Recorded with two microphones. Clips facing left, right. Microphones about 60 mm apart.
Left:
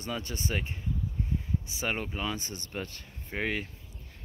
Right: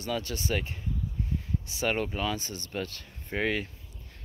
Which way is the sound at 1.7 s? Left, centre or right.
Centre.